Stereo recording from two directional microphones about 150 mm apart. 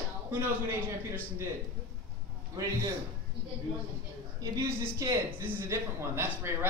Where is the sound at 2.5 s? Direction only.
25° right (ahead or behind).